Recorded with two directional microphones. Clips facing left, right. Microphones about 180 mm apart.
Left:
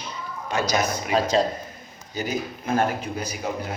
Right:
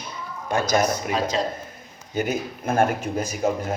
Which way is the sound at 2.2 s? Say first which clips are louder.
Right 3 dB; 50° right (ahead or behind).